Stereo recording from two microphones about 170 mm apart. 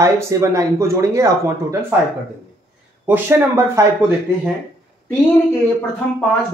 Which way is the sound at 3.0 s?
15° right (ahead or behind).